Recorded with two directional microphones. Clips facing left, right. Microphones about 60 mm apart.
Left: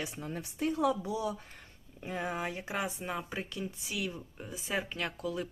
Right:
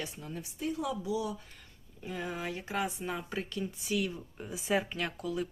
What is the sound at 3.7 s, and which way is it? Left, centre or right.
Speech, centre.